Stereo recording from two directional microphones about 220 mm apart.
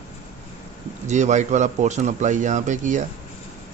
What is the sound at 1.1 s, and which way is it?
Speech, 30° right (ahead or behind).